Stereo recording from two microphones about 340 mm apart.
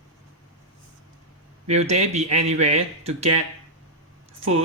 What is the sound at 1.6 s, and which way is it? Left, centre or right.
Speech, centre.